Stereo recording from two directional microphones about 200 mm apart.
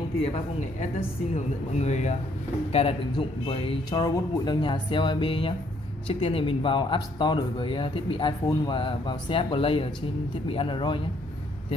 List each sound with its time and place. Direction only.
1.3 s speech: 35° left (ahead or behind)